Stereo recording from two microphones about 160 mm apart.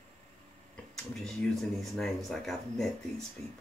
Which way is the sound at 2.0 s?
Centre (ahead or behind).